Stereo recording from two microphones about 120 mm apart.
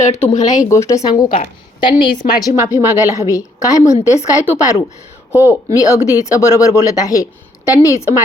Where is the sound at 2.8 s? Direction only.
30° left (ahead or behind).